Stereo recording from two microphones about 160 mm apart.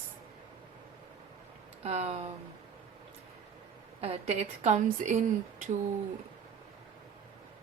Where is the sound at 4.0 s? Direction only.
40° right (ahead or behind).